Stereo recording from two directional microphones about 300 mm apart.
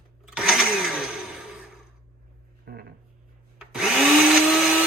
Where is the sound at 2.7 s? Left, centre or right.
Right.